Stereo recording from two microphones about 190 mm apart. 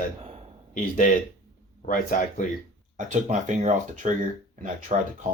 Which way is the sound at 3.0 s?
40° right (ahead or behind).